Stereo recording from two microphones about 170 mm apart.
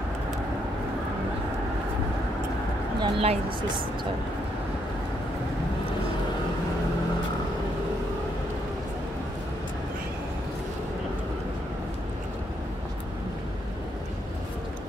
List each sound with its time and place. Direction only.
3.0 s speech: 35° right (ahead or behind)